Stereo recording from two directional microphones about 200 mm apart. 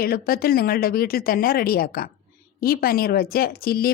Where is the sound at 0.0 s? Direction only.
50° left (ahead or behind).